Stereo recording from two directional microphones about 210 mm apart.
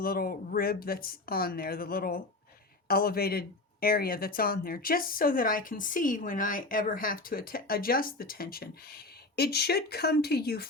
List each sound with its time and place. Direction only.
0.0 s speech: 45° left (ahead or behind)